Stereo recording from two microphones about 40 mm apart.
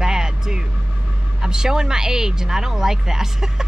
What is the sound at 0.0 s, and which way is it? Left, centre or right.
Vehicle, centre.